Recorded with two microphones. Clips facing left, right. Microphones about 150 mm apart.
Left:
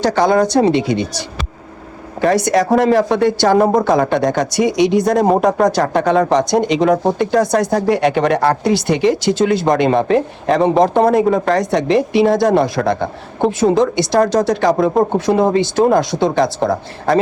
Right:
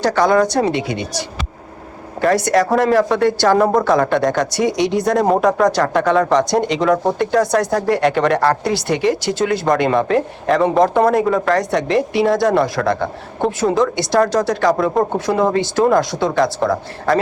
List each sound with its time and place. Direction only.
0.0 s speech: 25° left (ahead or behind)
2.2 s speech: 20° left (ahead or behind)